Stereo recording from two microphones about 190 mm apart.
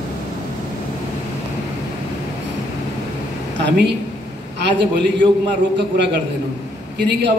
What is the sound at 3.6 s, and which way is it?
A man's voice, 60° right (ahead or behind).